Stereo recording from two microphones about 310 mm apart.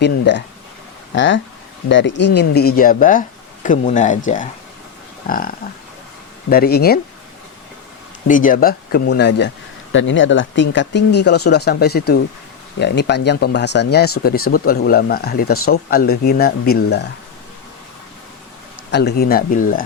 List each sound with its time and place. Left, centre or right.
0.0 s speech: left
5.3 s speech: left
8.3 s speech: left
18.9 s speech: left